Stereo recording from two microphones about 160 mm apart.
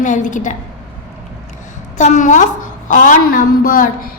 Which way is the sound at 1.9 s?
50° left (ahead or behind).